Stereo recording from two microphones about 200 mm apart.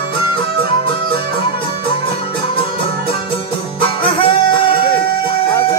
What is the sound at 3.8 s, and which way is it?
Music, 25° left (ahead or behind).